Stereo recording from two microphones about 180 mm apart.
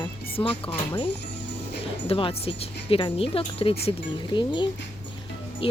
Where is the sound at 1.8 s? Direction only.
30° left (ahead or behind).